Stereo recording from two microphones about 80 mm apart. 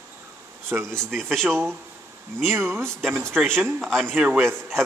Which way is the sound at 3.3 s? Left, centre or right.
Centre.